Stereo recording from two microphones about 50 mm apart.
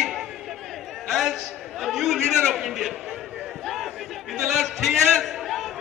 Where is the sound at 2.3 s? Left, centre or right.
Centre.